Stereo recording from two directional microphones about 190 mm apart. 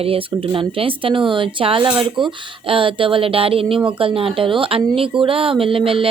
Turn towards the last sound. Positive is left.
turn(degrees=-30)  # may be behind; listen again after turning